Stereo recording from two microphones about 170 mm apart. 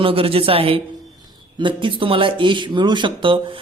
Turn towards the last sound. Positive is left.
turn(degrees=-30)  # may be behind; listen again after turning